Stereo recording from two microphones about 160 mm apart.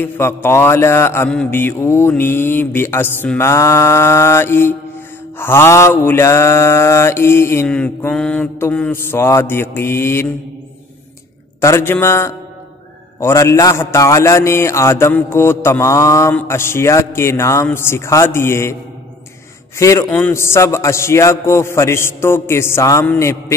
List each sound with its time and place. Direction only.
0.0 s mantra: 15° left (ahead or behind)
11.6 s mantra: 15° left (ahead or behind)
19.8 s mantra: 20° left (ahead or behind)